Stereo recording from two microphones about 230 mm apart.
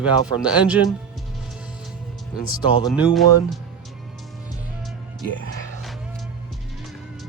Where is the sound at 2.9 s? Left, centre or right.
Centre.